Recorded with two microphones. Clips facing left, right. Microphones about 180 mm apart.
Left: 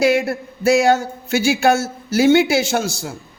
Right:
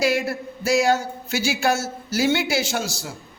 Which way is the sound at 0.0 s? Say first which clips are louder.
Left 5 dB; 55° left (ahead or behind).